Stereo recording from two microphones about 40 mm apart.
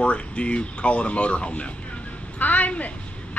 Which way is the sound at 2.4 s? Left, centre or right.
Left.